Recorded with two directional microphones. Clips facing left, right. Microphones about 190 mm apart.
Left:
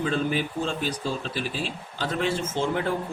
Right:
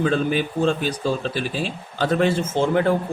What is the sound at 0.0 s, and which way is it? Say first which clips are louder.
Speech: right 5 dB; 65° right (ahead or behind).